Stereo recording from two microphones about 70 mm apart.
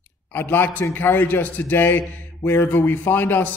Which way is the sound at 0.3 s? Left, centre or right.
Left.